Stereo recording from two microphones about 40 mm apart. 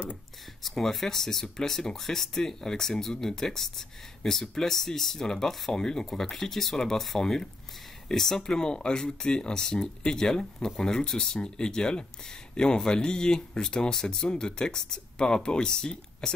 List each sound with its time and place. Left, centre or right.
0.7 s speech: centre
8.4 s speech: centre